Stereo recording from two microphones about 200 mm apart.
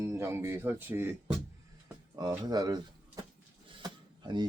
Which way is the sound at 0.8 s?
10° right (ahead or behind).